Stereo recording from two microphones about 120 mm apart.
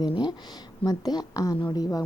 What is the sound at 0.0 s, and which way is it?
Speech, 35° left (ahead or behind).